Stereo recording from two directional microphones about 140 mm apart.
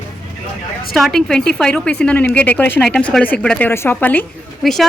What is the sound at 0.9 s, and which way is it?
A woman's voice, centre (ahead or behind).